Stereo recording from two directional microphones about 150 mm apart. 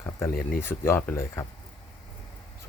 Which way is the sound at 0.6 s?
15° left (ahead or behind).